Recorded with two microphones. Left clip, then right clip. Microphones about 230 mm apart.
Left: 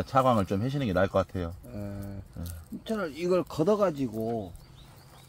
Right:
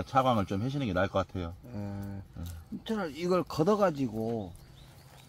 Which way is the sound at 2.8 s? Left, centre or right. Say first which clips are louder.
Left 3 dB; right.